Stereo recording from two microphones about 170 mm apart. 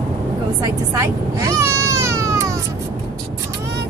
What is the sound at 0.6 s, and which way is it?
Baby cry, 20° right (ahead or behind).